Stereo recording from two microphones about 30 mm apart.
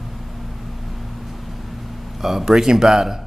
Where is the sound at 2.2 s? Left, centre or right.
Centre.